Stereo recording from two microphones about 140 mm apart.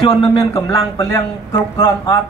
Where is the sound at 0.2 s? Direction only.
35° left (ahead or behind).